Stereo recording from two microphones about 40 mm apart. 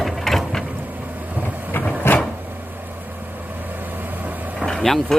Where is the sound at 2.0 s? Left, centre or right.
Left.